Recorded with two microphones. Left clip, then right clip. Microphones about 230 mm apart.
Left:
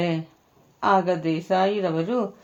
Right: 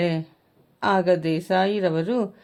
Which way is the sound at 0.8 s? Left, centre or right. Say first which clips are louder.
Even; right.